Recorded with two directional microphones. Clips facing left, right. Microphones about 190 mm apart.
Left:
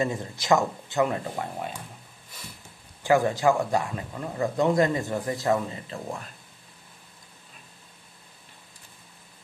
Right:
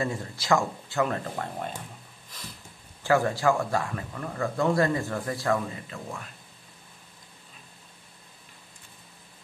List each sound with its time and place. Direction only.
0.0 s speech: 20° left (ahead or behind)
3.0 s speech: 15° left (ahead or behind)